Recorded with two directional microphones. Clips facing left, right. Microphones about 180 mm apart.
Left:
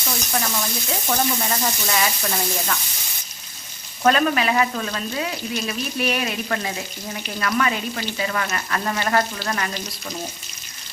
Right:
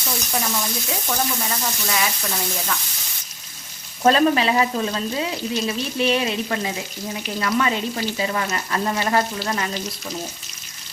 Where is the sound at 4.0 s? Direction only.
30° right (ahead or behind).